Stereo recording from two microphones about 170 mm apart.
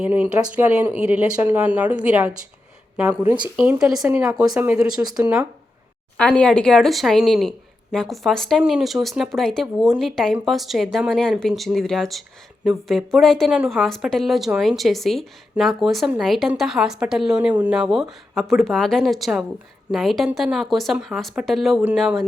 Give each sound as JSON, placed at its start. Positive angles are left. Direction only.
{"t": 0.0, "sound": "a woman's voice", "side_deg": -10}
{"t": 5.1, "sound": "speech", "side_deg": -5}
{"t": 6.1, "sound": "a woman's voice", "side_deg": 5}